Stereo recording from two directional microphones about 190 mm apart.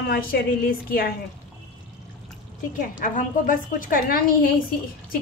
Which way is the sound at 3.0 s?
45° left (ahead or behind).